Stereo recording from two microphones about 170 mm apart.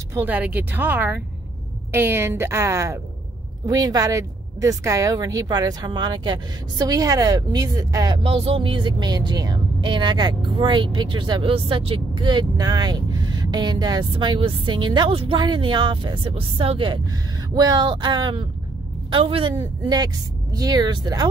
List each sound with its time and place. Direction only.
0.1 s speech: 10° right (ahead or behind)